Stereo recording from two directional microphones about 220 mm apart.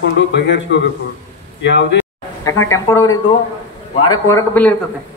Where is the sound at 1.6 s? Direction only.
55° left (ahead or behind).